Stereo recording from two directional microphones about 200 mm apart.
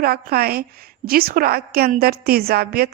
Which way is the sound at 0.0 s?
50° right (ahead or behind).